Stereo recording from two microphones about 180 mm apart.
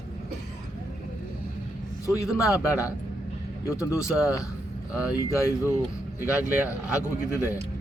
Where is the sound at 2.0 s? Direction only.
15° left (ahead or behind).